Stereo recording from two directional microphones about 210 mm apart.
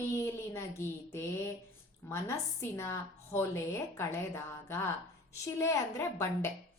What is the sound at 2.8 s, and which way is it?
Speech, 10° left (ahead or behind).